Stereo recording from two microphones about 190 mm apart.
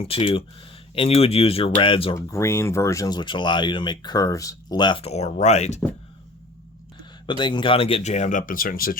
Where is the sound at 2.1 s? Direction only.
15° left (ahead or behind); by 5.7 s 35° left (ahead or behind).